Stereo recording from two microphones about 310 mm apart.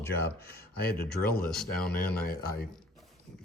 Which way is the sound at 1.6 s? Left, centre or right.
Centre.